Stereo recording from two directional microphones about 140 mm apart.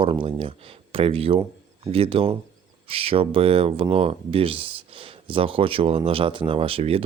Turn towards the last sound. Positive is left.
turn(degrees=-45)  # may be behind; listen again after turning